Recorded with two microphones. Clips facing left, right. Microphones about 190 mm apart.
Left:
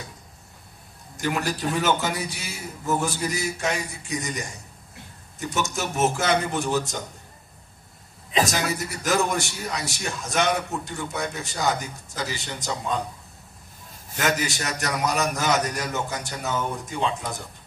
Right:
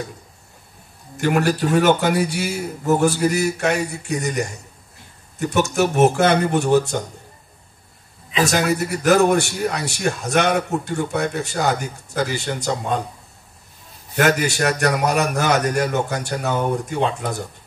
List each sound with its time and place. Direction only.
1.1 s a man's voice: 60° right (ahead or behind)
8.5 s a man's voice: 60° right (ahead or behind)
14.1 s a man's voice: 55° right (ahead or behind)